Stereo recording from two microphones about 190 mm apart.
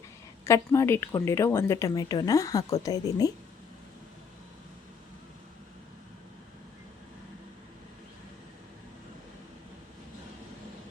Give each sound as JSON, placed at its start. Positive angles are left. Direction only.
{"t": 0.4, "sound": "a woman's voice", "side_deg": 15}